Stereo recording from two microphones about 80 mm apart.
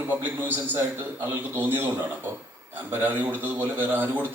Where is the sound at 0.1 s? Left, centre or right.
Right.